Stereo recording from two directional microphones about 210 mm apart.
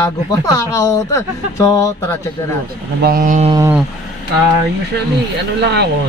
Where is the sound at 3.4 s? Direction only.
15° right (ahead or behind).